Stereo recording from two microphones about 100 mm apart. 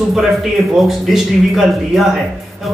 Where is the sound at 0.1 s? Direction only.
5° right (ahead or behind).